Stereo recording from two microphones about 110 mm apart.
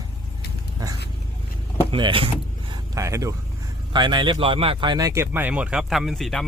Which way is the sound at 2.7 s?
30° right (ahead or behind).